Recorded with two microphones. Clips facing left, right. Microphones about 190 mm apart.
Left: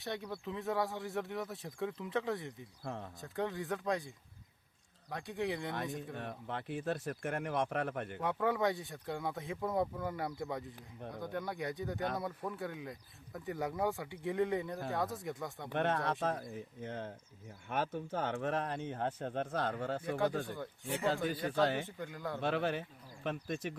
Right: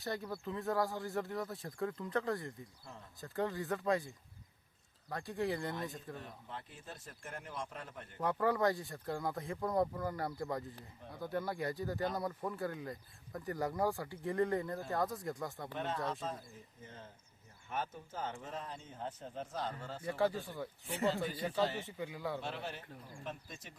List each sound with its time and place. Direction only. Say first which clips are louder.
0.0 s speech: even; centre (ahead or behind)
2.8 s speech: left 11 dB; 70° left (ahead or behind)
3.2 s speech: right 2 dB; centre (ahead or behind)
6.1 s speech: left 6 dB; 65° left (ahead or behind)
8.2 s speech: right 1 dB; centre (ahead or behind)
15.7 s speech: left 7 dB; 65° left (ahead or behind)
20.6 s speech: left 3 dB; centre (ahead or behind)
21.6 s speech: left 3 dB; 80° left
21.9 s speech: right 1 dB; 5° right (ahead or behind)
22.4 s speech: left 9 dB; 60° left (ahead or behind)